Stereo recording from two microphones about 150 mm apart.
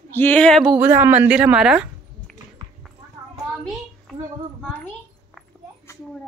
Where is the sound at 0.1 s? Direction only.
10° left (ahead or behind).